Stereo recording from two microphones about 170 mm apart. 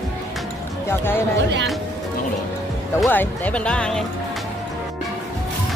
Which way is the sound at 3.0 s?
10° left (ahead or behind).